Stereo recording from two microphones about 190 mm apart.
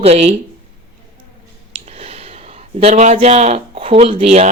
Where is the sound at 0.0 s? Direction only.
35° right (ahead or behind).